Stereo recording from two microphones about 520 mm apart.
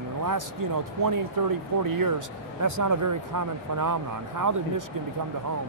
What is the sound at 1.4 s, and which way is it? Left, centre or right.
Speech, right.